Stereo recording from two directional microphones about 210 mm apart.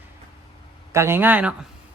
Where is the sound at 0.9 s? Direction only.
10° right (ahead or behind).